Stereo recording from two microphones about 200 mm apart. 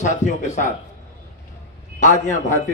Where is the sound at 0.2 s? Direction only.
35° left (ahead or behind).